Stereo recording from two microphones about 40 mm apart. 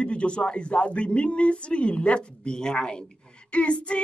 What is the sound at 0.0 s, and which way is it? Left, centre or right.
Speech, left.